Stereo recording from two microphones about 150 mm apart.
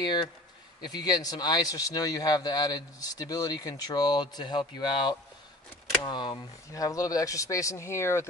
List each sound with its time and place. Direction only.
0.0 s speech: 30° left (ahead or behind)